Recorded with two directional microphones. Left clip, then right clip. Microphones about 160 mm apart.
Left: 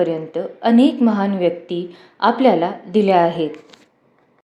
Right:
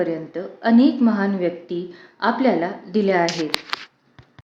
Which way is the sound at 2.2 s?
20° left (ahead or behind).